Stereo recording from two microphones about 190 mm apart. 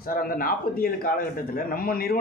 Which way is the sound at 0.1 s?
50° left (ahead or behind).